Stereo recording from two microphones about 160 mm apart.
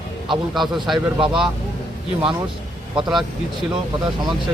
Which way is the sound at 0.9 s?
30° right (ahead or behind).